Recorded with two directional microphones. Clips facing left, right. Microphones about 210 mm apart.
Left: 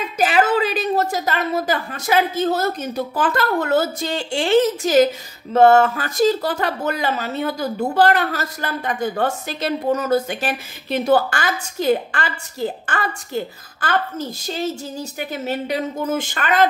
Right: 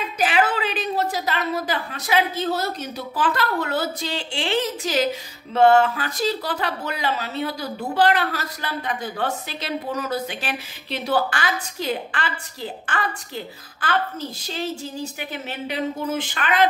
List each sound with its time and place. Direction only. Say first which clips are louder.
0.2 s a woman's voice: left 4 dB; 40° left (ahead or behind)